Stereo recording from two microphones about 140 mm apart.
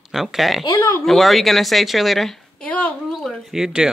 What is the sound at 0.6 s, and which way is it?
Speech, 25° left (ahead or behind).